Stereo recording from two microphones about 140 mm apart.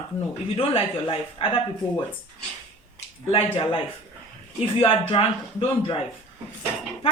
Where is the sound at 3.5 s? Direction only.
40° left (ahead or behind).